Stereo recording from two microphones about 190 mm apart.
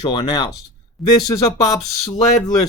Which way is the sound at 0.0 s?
25° left (ahead or behind).